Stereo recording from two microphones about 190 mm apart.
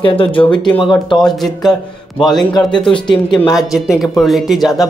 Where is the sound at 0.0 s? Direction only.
25° left (ahead or behind).